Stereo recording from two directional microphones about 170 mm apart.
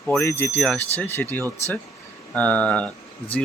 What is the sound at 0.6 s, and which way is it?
Speech, 5° left (ahead or behind).